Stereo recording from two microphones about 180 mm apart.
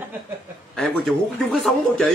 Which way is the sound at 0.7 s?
Centre (ahead or behind).